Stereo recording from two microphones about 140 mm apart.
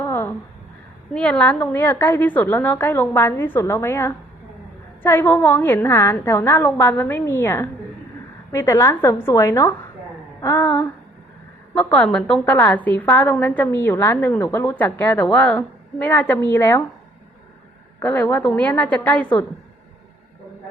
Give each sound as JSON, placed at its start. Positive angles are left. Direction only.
{"t": 0.0, "sound": "a sound", "side_deg": 15}
{"t": 1.1, "sound": "a woman's voice", "side_deg": 10}
{"t": 18.0, "sound": "a woman's voice", "side_deg": 15}